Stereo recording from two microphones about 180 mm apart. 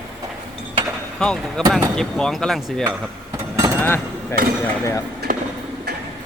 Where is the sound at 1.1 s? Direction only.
5° left (ahead or behind).